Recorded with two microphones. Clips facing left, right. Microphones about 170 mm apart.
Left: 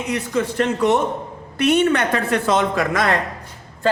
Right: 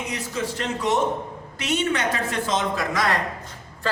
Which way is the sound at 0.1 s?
60° left (ahead or behind).